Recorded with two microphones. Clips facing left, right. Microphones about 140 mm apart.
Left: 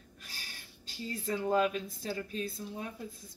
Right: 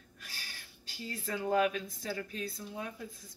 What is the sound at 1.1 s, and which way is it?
Speech, 25° left (ahead or behind).